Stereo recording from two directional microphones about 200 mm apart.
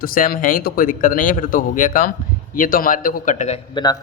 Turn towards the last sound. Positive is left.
turn(degrees=20)  # may be behind; listen again after turning